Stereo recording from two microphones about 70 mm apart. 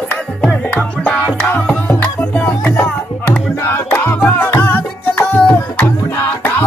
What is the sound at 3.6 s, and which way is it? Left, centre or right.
Music, left.